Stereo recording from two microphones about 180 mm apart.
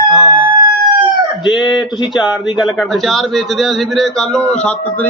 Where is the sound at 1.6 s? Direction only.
25° left (ahead or behind).